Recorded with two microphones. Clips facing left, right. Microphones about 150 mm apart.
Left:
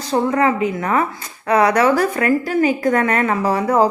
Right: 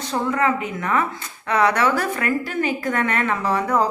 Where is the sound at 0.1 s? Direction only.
35° left (ahead or behind).